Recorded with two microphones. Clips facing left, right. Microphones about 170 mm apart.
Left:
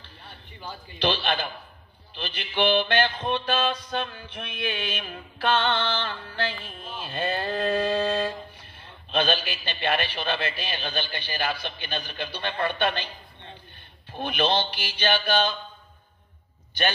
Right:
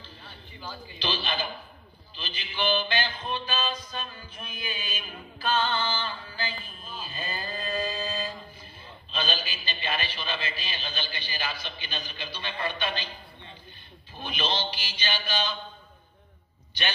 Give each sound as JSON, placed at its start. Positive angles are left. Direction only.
{"t": 0.9, "sound": "music", "side_deg": 60}
{"t": 14.1, "sound": "music", "side_deg": 60}
{"t": 16.8, "sound": "a man's voice", "side_deg": 50}